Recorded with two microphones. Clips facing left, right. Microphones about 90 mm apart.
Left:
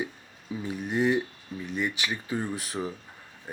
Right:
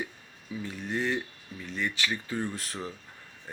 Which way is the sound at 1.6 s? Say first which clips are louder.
Left 1 dB; 15° left (ahead or behind).